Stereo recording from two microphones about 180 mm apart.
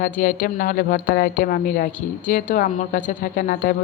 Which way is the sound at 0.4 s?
50° left (ahead or behind).